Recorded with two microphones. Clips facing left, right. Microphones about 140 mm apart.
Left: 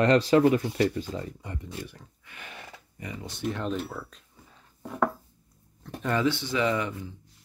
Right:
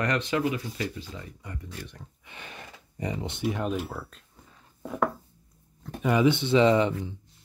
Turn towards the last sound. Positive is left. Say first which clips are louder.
# right 6 dB
turn(degrees=-25)  # may be behind; listen again after turning